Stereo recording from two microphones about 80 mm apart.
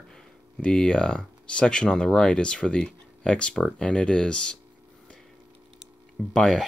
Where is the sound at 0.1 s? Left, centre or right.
Centre.